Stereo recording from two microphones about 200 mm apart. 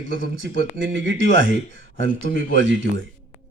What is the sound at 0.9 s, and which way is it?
A man's voice, 65° right (ahead or behind).